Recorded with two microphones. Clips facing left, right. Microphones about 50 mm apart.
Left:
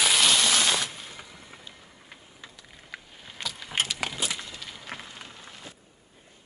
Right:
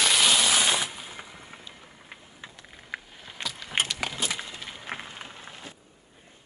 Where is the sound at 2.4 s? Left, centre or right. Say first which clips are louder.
Right 2 dB; right.